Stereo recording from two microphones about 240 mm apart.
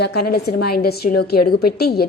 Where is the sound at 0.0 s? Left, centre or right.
Left.